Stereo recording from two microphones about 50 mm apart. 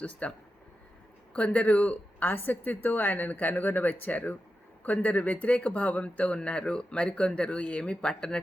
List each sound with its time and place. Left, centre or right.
0.0 s speech: left
1.5 s speech: left